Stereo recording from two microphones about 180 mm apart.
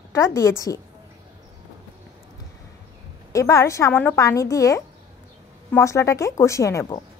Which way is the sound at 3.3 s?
15° left (ahead or behind).